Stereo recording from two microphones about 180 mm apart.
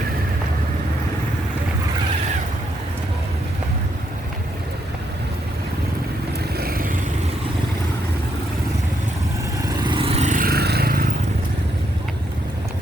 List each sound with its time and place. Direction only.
6.6 s vehicle: 55° right (ahead or behind)
9.8 s vehicle: 30° right (ahead or behind); by 11.1 s 55° right (ahead or behind)